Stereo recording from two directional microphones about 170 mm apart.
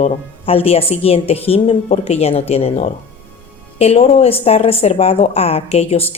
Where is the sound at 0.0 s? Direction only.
35° left (ahead or behind).